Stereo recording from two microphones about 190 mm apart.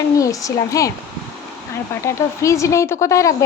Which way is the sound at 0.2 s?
15° left (ahead or behind).